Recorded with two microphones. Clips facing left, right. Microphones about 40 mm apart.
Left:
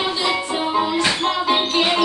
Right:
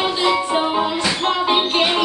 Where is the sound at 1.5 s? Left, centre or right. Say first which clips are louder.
Even; right.